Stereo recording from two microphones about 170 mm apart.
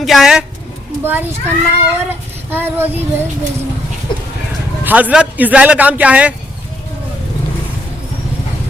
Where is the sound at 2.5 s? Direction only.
10° right (ahead or behind).